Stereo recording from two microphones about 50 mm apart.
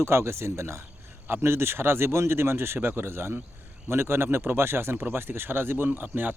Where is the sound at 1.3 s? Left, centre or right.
Right.